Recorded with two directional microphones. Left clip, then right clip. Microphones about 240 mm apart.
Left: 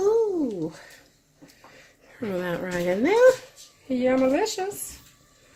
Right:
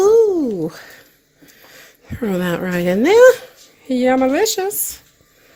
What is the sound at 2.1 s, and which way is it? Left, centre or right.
Speech, right.